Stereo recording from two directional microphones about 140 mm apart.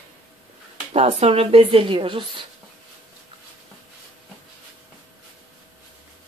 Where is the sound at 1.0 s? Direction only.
50° right (ahead or behind).